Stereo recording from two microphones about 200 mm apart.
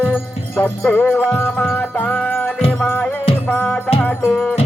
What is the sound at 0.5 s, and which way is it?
Music, 10° left (ahead or behind).